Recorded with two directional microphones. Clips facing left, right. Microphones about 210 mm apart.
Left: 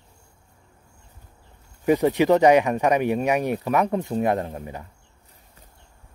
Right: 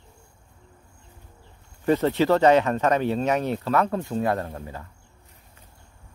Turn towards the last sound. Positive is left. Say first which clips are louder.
# left 2 dB
turn(degrees=15)  # may be behind; listen again after turning